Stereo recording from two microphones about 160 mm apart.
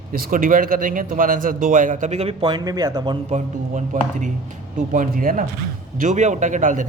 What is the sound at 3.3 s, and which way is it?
A man's voice, 50° right (ahead or behind).